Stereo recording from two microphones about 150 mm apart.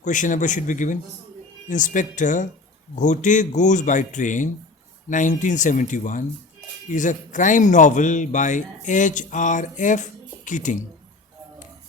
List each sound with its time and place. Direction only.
0.0 s speech: 60° left (ahead or behind)